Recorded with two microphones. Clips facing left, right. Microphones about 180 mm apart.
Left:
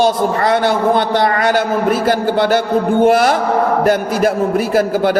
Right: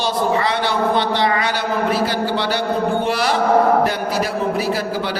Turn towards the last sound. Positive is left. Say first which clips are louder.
# left 7 dB
turn(degrees=50)  # may be behind; listen again after turning